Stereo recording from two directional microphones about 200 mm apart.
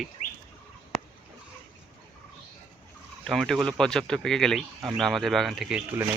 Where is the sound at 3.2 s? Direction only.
Centre (ahead or behind).